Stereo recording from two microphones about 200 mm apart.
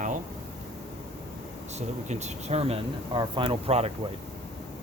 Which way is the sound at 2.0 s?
35° right (ahead or behind).